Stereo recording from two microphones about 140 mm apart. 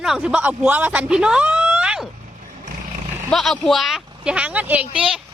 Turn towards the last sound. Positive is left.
turn(degrees=-5)  # may be behind; listen again after turning